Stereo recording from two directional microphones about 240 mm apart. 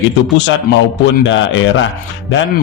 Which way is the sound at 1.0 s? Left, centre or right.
Left.